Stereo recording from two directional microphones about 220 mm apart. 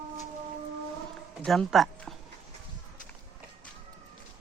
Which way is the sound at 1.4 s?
Centre (ahead or behind).